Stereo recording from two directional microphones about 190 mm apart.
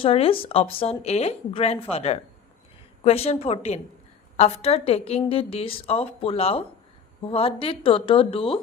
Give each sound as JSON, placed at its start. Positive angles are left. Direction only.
{"t": 0.0, "sound": "a woman's voice", "side_deg": 30}